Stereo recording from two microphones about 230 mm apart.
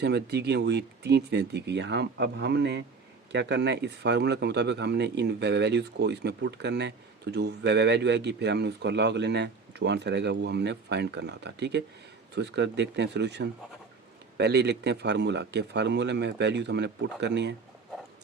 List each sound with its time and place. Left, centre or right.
0.0 s speech: right